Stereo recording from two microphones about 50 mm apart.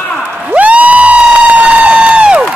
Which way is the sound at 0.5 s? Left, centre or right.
Right.